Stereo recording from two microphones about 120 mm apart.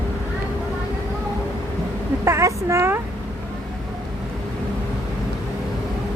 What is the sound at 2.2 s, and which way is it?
Speech, 25° right (ahead or behind).